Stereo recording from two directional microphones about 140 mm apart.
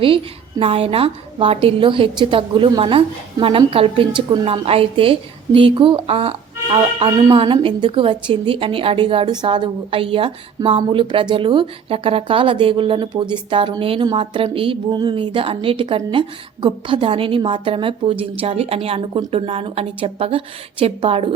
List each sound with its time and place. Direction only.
0.6 s a woman's voice: 45° right (ahead or behind)